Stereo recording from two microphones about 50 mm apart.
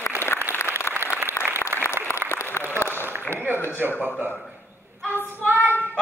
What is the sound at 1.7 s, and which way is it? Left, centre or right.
Applause, right.